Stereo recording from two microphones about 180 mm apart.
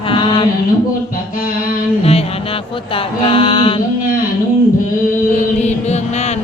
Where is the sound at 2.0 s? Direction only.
35° left (ahead or behind).